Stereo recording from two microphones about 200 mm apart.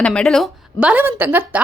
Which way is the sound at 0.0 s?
5° left (ahead or behind).